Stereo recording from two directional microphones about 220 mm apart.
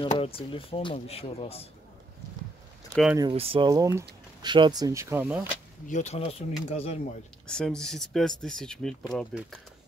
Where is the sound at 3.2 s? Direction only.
25° right (ahead or behind); by 5.5 s 10° right (ahead or behind).